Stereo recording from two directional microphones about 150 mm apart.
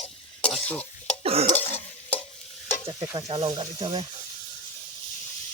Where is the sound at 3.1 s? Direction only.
30° right (ahead or behind).